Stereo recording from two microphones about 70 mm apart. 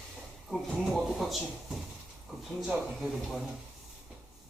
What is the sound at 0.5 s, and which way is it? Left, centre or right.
Speech, centre.